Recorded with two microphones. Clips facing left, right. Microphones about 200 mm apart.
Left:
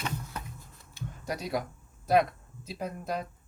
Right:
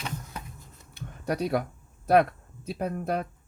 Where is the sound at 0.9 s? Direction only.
60° right (ahead or behind).